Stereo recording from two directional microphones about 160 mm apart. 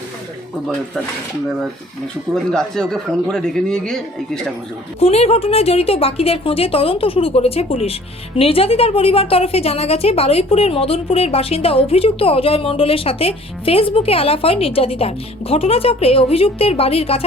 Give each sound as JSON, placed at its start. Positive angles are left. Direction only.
{"t": 2.3, "sound": "speech", "side_deg": 5}
{"t": 4.9, "sound": "a woman's voice", "side_deg": 40}